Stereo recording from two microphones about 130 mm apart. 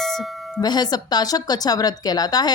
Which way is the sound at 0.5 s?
30° left (ahead or behind).